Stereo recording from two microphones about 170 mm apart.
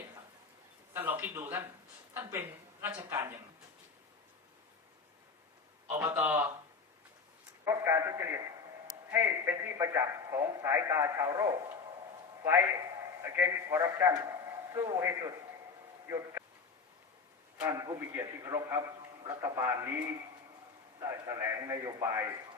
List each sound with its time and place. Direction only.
0.9 s a man's voice: 10° right (ahead or behind)
5.9 s a man's voice: 15° right (ahead or behind)
7.6 s a man's voice: 15° right (ahead or behind)
17.6 s a man's voice: 25° right (ahead or behind)